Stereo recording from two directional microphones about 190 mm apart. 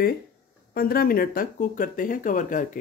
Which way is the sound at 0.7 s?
50° left (ahead or behind).